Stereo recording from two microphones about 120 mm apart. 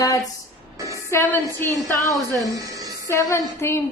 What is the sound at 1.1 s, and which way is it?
A woman's voice, 20° left (ahead or behind).